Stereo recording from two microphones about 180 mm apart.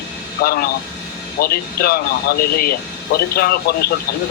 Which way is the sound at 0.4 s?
55° left (ahead or behind).